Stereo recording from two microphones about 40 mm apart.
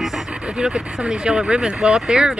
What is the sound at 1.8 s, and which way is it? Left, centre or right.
Speech, centre.